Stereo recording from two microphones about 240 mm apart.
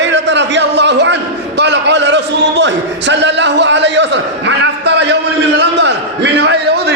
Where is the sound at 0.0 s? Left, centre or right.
Right.